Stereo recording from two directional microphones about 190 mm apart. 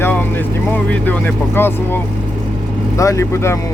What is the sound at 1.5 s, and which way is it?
Speech, 10° left (ahead or behind).